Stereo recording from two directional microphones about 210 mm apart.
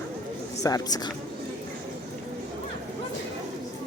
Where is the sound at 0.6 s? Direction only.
20° left (ahead or behind).